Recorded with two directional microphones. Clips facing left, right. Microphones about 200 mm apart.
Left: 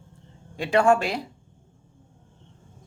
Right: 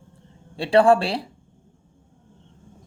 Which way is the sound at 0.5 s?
30° right (ahead or behind).